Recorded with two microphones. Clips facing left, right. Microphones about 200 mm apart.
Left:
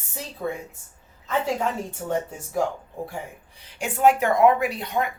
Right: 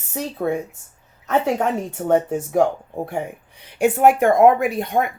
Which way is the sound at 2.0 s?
55° right (ahead or behind).